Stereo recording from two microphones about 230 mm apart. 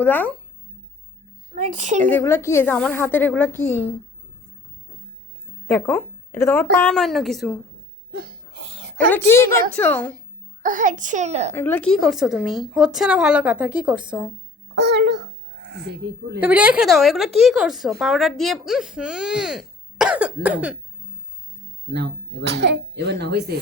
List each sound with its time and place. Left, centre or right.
0.0 s a woman's voice: centre
1.5 s a child's voice: right
2.0 s a woman's voice: centre
5.6 s a woman's voice: centre
8.1 s a sound: right
9.0 s a woman's voice: centre
10.6 s a child's voice: right
11.5 s a woman's voice: centre
14.8 s speech: right
16.4 s a woman's voice: centre
21.8 s speech: right